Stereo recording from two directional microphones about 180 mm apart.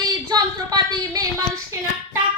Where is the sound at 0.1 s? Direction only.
20° right (ahead or behind).